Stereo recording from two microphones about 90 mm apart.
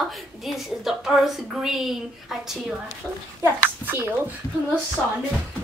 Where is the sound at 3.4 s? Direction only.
25° right (ahead or behind).